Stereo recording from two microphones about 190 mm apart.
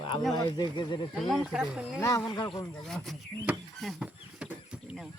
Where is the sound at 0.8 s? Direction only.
25° left (ahead or behind).